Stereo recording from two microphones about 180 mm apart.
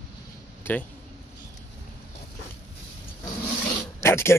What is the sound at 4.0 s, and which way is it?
Speech, 15° left (ahead or behind).